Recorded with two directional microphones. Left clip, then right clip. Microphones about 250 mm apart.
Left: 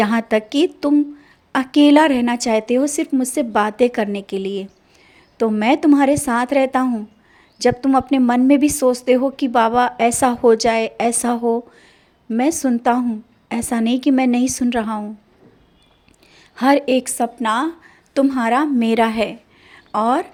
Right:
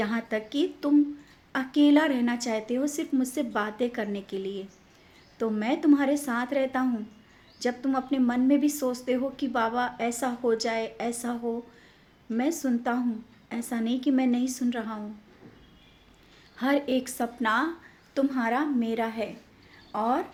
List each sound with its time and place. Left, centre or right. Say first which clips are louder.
0.0 s a woman's voice: left 12 dB; left
16.6 s a woman's voice: left 11 dB; left